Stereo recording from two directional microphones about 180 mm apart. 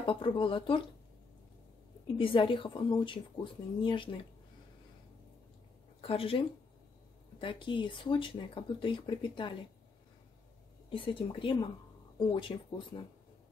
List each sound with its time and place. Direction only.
0.0 s speech: 30° left (ahead or behind)
2.1 s speech: 30° left (ahead or behind)
5.9 s speech: 30° left (ahead or behind)
10.9 s speech: 30° left (ahead or behind)